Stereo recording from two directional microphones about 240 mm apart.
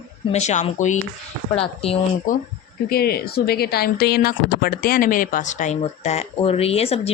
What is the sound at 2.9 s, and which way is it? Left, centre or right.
Speech, left.